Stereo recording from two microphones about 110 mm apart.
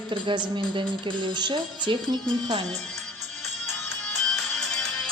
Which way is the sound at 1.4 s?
40° right (ahead or behind).